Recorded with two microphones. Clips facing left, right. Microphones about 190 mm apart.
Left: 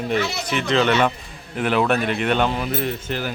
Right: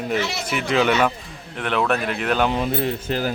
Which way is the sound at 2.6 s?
30° right (ahead or behind).